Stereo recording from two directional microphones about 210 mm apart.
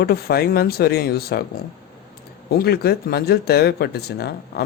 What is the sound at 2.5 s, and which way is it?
Speech, 50° left (ahead or behind).